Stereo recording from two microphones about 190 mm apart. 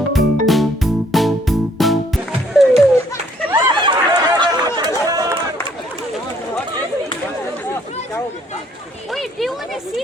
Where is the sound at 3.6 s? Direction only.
25° right (ahead or behind).